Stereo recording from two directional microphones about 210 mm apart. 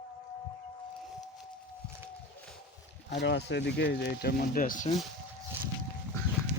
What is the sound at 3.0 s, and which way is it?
Speech, 55° left (ahead or behind).